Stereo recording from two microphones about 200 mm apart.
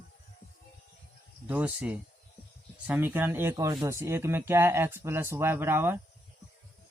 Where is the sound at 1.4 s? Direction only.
5° right (ahead or behind).